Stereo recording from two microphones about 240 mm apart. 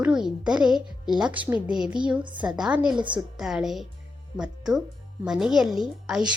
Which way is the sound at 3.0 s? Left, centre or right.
Centre.